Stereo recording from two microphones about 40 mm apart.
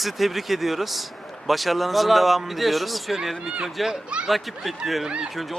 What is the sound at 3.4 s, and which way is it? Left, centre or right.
Speech, centre.